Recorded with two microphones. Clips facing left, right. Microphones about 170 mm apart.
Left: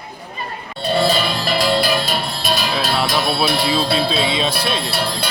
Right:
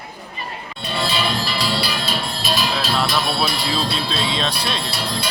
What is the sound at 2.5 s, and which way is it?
Music, 60° left (ahead or behind).